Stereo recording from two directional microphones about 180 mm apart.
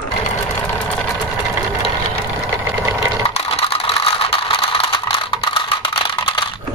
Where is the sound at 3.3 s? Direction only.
35° left (ahead or behind).